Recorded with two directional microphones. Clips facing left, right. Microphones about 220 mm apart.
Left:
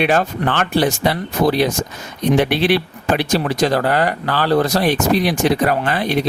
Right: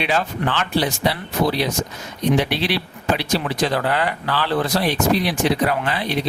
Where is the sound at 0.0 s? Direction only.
50° left (ahead or behind).